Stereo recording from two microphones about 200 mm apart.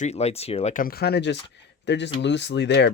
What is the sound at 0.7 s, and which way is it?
Speech, 50° left (ahead or behind).